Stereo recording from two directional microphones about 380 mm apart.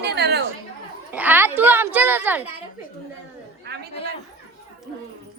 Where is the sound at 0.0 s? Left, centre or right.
Right.